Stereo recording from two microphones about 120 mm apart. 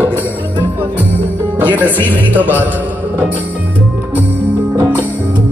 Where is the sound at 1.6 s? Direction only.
15° right (ahead or behind).